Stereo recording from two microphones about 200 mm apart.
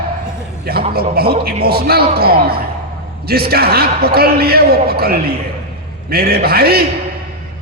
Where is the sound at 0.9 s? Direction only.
50° right (ahead or behind).